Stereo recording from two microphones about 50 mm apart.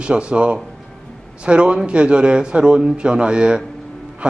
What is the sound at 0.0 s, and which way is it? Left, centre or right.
A man's voice, right.